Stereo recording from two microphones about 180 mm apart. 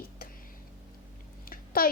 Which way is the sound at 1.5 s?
55° left (ahead or behind).